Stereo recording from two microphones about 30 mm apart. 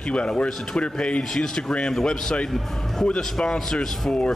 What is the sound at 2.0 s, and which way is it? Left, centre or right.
Speech, left.